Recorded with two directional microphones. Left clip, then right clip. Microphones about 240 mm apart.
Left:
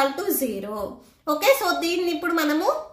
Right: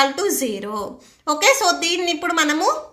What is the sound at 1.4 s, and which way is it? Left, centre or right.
A woman's voice, right.